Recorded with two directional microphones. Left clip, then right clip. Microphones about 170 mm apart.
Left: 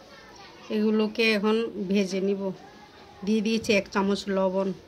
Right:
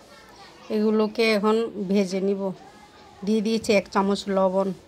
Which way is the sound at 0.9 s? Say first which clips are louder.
Right 2 dB; 35° right (ahead or behind).